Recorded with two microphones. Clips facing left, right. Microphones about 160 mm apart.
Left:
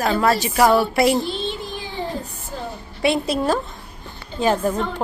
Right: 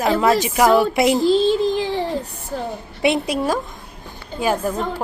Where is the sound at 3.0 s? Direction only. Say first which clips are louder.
Right 1 dB; 20° right (ahead or behind).